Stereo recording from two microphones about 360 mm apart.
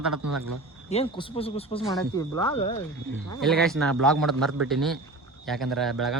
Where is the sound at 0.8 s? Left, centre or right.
Centre.